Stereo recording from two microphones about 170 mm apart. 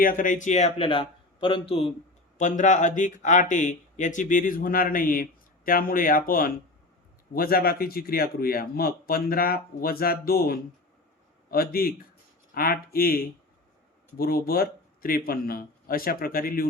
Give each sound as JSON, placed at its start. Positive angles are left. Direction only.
{"t": 0.0, "sound": "speech", "side_deg": 55}
{"t": 2.4, "sound": "speech", "side_deg": 45}